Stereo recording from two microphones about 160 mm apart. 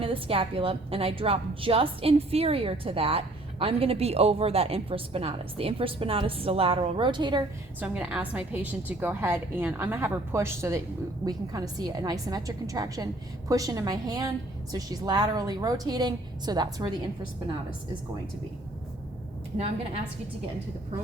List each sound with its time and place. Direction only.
0.0 s a woman's voice: 35° right (ahead or behind)
7.8 s a woman's voice: 10° right (ahead or behind); by 16.9 s 25° right (ahead or behind)